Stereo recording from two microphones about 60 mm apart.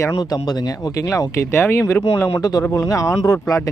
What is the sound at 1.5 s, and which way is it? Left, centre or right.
Speech, left.